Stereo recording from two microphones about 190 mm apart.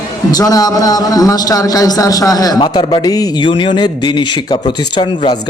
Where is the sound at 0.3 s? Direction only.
20° left (ahead or behind).